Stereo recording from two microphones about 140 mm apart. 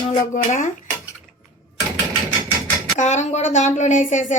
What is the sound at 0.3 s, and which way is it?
Speech, 70° left (ahead or behind).